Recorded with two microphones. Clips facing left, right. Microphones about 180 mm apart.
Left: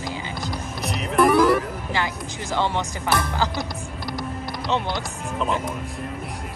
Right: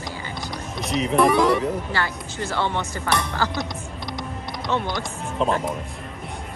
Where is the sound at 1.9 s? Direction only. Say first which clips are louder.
Even; 15° left (ahead or behind).